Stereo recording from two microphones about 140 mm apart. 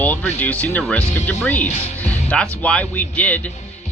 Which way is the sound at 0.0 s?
10° left (ahead or behind).